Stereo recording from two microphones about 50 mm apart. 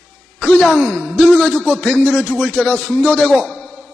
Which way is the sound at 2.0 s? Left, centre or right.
Left.